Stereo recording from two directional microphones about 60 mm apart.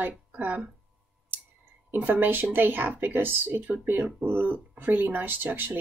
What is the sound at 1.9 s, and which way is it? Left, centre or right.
Speech, right.